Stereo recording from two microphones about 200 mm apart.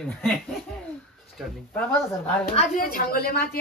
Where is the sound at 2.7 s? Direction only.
45° left (ahead or behind).